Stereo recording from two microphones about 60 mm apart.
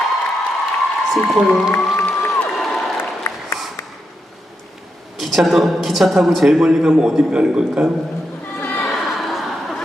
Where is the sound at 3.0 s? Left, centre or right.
Left.